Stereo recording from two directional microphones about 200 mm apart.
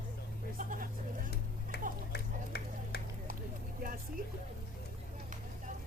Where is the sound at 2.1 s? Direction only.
55° left (ahead or behind).